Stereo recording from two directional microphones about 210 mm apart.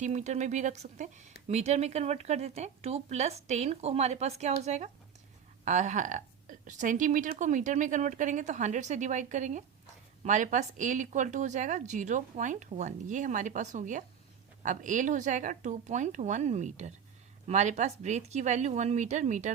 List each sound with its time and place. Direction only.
0.0 s a woman's voice: 35° right (ahead or behind)